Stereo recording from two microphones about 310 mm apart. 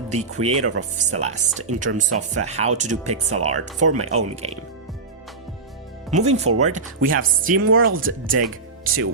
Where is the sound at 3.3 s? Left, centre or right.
Right.